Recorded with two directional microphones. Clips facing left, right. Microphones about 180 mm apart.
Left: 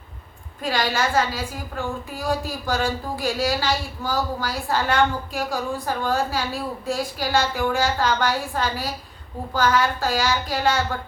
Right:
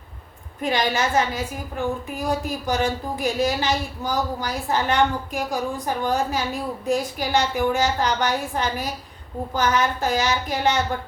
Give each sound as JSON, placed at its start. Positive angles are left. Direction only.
{"t": 0.6, "sound": "a woman's voice", "side_deg": -20}